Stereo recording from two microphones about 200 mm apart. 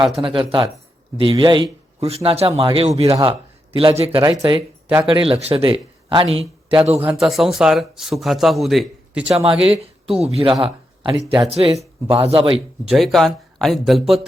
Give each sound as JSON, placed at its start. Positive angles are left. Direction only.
{"t": 0.2, "sound": "speech", "side_deg": -25}
{"t": 7.0, "sound": "speech", "side_deg": -5}
{"t": 9.4, "sound": "speech", "side_deg": -30}
{"t": 10.6, "sound": "a sound", "side_deg": -25}
{"t": 11.3, "sound": "speech", "side_deg": -25}
{"t": 12.8, "sound": "speech", "side_deg": 0}